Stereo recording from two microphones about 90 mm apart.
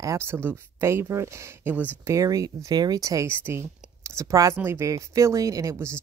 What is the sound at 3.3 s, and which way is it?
A woman's voice, 30° right (ahead or behind).